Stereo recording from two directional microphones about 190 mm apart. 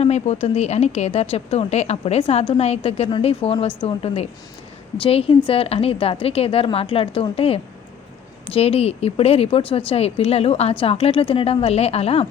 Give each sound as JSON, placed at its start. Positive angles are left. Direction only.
{"t": 0.0, "sound": "a woman's voice", "side_deg": 35}